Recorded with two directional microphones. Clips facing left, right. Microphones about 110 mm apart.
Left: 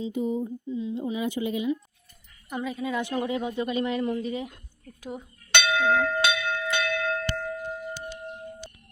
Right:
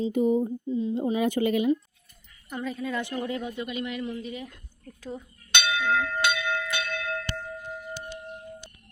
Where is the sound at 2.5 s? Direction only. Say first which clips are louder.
Left 1 dB; 5° left (ahead or behind).